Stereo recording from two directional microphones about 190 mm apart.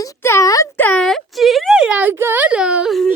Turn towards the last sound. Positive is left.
turn(degrees=0)  # may be behind; listen again after turning